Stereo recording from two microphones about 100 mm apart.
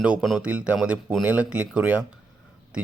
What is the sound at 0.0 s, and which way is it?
A man's voice, 10° right (ahead or behind).